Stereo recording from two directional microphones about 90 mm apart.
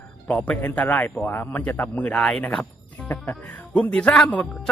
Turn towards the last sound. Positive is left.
turn(degrees=10)  # may be behind; listen again after turning